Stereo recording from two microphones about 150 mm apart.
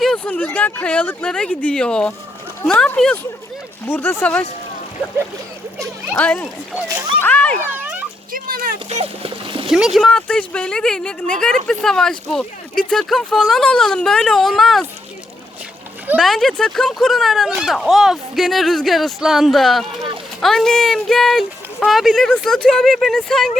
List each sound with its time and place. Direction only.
0.0 s speech: 5° left (ahead or behind)
6.1 s speech: 10° left (ahead or behind)
7.6 s a sound: 10° right (ahead or behind)
8.3 s a sound: 75° right (ahead or behind)
8.9 s a child's voice: 40° right (ahead or behind)
9.6 s speech: centre (ahead or behind)
16.1 s speech: centre (ahead or behind)